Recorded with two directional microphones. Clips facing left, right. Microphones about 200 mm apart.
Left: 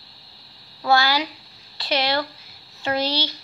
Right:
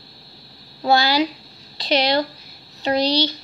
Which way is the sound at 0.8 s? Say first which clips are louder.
Right 3 dB; 20° right (ahead or behind).